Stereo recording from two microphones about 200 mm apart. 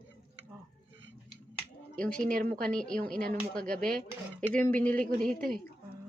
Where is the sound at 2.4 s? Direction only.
5° left (ahead or behind).